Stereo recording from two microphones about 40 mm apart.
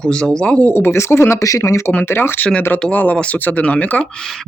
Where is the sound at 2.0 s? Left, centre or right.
Left.